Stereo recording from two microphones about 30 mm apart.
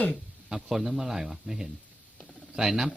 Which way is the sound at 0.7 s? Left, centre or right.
Centre.